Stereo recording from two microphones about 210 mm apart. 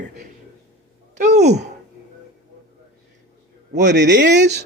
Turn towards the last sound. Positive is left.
turn(degrees=-55)  # may be behind; listen again after turning